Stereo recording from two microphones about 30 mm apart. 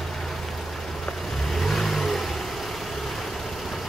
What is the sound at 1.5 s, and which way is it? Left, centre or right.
Vehicle, centre.